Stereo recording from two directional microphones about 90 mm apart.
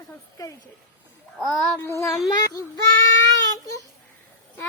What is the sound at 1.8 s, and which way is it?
Speech, 30° left (ahead or behind).